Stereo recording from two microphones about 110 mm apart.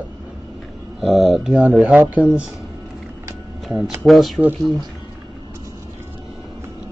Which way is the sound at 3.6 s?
Centre (ahead or behind).